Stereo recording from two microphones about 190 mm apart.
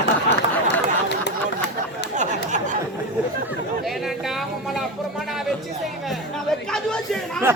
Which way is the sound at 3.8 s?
Centre (ahead or behind).